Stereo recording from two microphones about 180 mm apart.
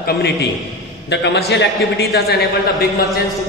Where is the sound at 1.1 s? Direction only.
70° left (ahead or behind).